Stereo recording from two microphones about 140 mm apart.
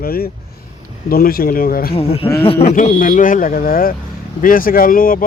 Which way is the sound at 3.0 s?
75° left (ahead or behind).